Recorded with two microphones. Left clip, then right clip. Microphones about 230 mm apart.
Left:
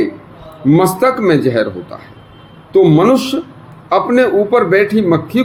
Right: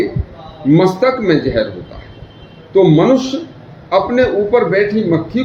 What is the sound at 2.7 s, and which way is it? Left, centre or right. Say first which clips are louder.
Speech: left 1 dB; left.